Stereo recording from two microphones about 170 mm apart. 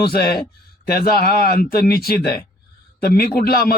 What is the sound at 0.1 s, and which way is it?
A man's voice, 65° left (ahead or behind).